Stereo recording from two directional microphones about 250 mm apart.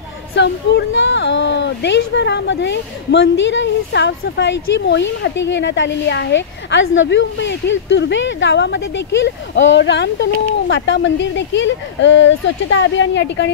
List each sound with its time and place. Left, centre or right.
0.4 s speech: left